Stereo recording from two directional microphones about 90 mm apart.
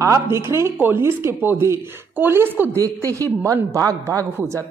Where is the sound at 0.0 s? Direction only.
30° right (ahead or behind).